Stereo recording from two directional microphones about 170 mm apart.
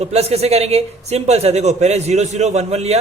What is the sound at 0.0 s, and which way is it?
A man's voice, 35° right (ahead or behind).